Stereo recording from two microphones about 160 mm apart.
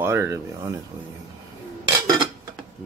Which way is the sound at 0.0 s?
15° right (ahead or behind).